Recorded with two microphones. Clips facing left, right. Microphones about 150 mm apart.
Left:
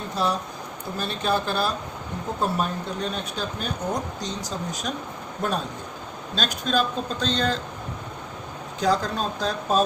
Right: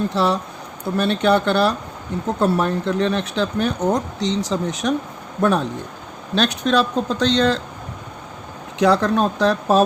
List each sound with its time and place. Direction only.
0.1 s speech: 80° right
8.8 s speech: 75° right (ahead or behind)
9.0 s speech: 65° right (ahead or behind)